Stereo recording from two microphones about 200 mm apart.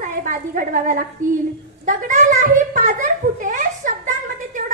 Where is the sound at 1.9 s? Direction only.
40° right (ahead or behind).